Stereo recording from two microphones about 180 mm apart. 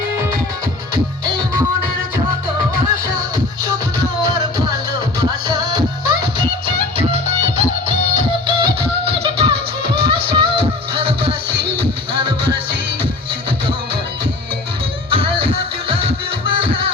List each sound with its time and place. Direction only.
5.5 s music: 25° right (ahead or behind)
8.1 s music: 25° right (ahead or behind)
15.1 s music: 30° right (ahead or behind)